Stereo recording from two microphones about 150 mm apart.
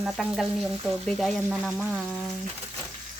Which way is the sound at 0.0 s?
Centre (ahead or behind).